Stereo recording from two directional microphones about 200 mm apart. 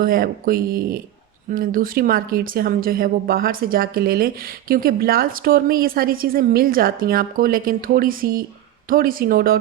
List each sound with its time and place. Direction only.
0.0 s speech: 45° right (ahead or behind)